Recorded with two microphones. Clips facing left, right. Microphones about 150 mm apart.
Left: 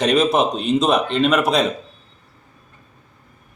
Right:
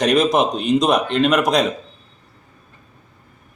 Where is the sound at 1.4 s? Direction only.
5° left (ahead or behind).